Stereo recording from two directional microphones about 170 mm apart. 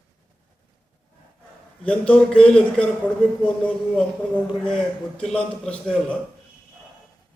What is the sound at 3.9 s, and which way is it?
A man's voice, 5° left (ahead or behind).